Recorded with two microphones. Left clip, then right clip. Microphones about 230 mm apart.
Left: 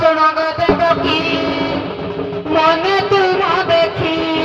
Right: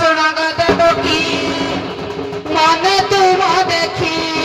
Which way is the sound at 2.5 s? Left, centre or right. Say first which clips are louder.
Right 1 dB; right.